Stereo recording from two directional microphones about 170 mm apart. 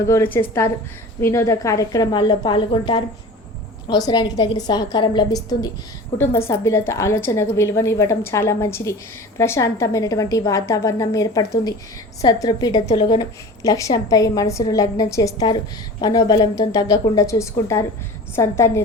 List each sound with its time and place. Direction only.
0.0 s a woman's voice: 15° left (ahead or behind)